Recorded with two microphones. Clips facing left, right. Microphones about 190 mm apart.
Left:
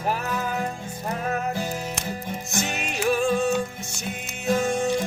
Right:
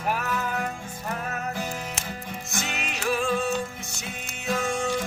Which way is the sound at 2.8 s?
40° left (ahead or behind).